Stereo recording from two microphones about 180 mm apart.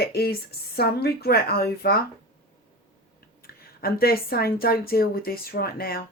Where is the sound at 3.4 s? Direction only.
55° left (ahead or behind).